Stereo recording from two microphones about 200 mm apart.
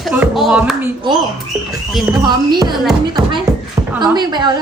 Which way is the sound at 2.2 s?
20° right (ahead or behind).